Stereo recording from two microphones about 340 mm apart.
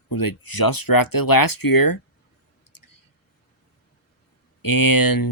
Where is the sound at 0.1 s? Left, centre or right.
Left.